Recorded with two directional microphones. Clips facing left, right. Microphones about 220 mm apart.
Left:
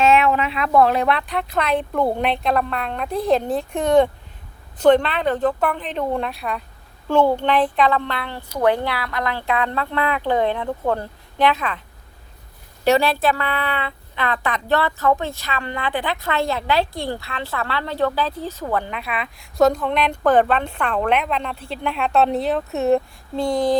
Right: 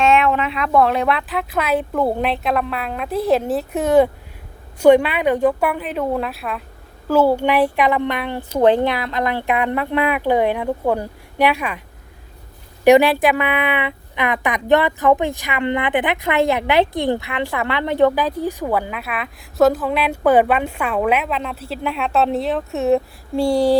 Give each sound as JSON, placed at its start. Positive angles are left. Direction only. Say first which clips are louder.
{"t": 0.0, "sound": "a woman's voice", "louder": "even", "side_deg": 0}
{"t": 12.8, "sound": "a woman's voice", "louder": "right 6 dB", "side_deg": -15}